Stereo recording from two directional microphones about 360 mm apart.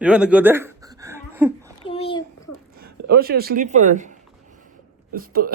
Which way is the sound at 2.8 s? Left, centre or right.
Right.